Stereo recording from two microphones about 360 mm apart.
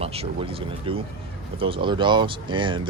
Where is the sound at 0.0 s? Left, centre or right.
Centre.